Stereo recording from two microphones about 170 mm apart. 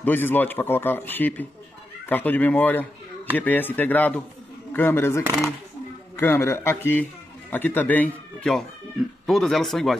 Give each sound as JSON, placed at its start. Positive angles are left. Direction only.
{"t": 0.0, "sound": "speech", "side_deg": 10}